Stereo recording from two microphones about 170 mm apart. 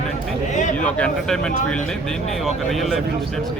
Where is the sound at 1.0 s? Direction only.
5° left (ahead or behind).